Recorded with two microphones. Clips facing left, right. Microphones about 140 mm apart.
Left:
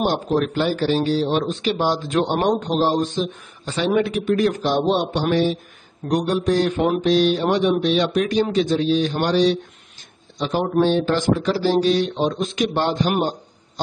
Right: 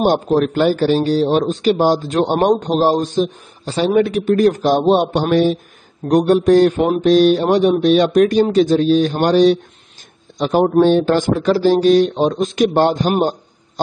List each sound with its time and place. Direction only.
0.0 s a man's voice: 50° right (ahead or behind)